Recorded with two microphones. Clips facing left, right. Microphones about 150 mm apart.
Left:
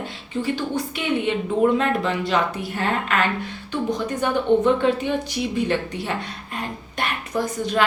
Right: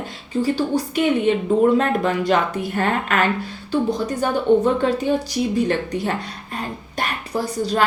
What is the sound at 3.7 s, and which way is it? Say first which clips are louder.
A woman's voice: right 4 dB; 35° right (ahead or behind).